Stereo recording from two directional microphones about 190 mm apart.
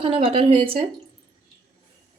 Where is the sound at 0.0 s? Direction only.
30° right (ahead or behind).